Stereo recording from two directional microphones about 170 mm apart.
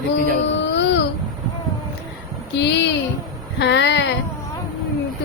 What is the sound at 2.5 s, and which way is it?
A woman's voice, 90° left.